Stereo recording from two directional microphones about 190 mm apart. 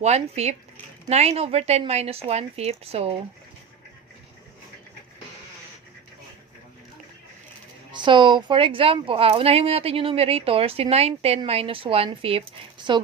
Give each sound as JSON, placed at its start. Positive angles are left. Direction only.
{"t": 0.0, "sound": "speech", "side_deg": -35}
{"t": 7.9, "sound": "a woman's voice", "side_deg": -25}